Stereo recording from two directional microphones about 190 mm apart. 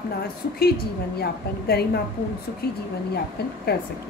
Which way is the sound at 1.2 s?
55° left (ahead or behind).